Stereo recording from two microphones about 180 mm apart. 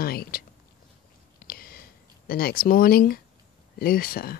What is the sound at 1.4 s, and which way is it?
Whispering, 55° left (ahead or behind).